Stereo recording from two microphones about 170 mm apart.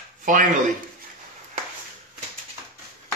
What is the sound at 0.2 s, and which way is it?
Speech, 50° right (ahead or behind).